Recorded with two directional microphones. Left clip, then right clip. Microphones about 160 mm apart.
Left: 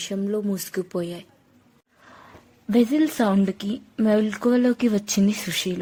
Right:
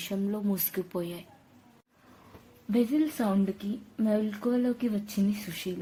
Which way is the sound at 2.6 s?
60° left (ahead or behind).